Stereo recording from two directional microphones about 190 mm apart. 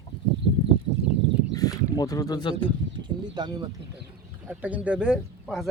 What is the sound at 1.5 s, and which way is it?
Speech, 20° left (ahead or behind).